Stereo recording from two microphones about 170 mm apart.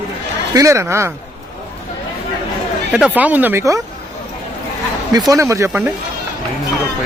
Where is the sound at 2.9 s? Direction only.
5° right (ahead or behind).